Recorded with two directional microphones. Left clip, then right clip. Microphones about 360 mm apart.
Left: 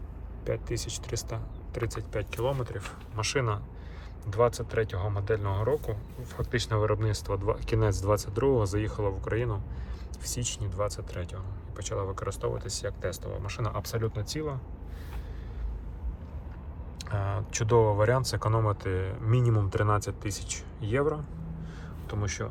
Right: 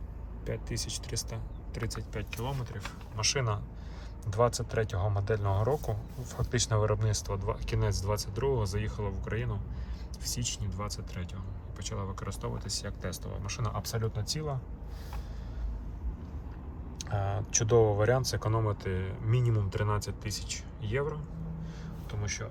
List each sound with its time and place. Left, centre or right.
0.4 s speech: centre
17.0 s speech: centre
21.6 s a sound: centre